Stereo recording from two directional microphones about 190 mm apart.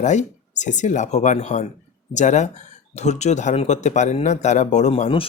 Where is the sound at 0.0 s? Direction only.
40° left (ahead or behind).